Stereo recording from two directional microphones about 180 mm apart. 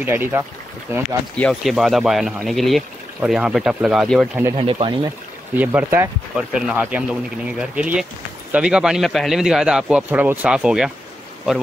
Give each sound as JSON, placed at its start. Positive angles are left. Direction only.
{"t": 0.0, "sound": "speech", "side_deg": -10}
{"t": 1.3, "sound": "speech", "side_deg": 5}
{"t": 4.6, "sound": "speech", "side_deg": -30}
{"t": 5.6, "sound": "speech", "side_deg": -10}